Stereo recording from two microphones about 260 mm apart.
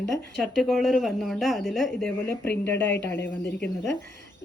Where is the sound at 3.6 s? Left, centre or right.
Left.